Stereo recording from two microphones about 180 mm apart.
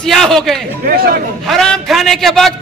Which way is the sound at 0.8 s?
55° right (ahead or behind).